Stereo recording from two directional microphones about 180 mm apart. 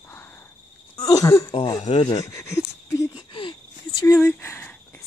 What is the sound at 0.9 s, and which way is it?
Wheeze, 20° left (ahead or behind).